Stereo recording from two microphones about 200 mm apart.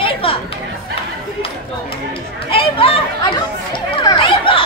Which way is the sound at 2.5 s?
25° left (ahead or behind).